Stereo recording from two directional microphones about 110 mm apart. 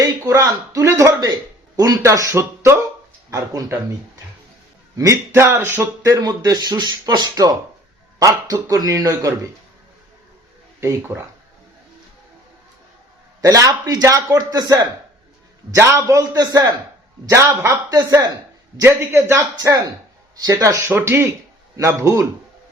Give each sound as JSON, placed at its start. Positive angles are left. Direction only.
{"t": 0.0, "sound": "a sound", "side_deg": -30}
{"t": 1.7, "sound": "speech", "side_deg": -35}
{"t": 5.3, "sound": "speech", "side_deg": -20}
{"t": 10.8, "sound": "speech", "side_deg": -25}
{"t": 13.4, "sound": "speech", "side_deg": -30}
{"t": 15.7, "sound": "speech", "side_deg": -25}
{"t": 17.2, "sound": "speech", "side_deg": -25}
{"t": 17.9, "sound": "speech", "side_deg": -35}
{"t": 18.8, "sound": "speech", "side_deg": -25}
{"t": 19.5, "sound": "speech", "side_deg": -35}